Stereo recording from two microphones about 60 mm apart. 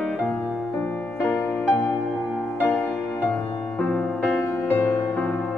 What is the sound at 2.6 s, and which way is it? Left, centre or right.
Music, left.